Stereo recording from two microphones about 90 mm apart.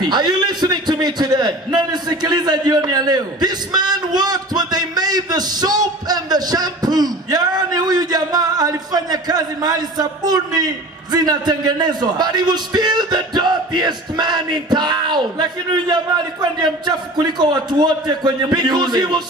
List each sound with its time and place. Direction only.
0.0 s a man's voice: 55° right (ahead or behind)